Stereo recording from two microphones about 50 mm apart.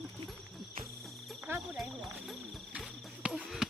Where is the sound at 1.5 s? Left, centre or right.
Right.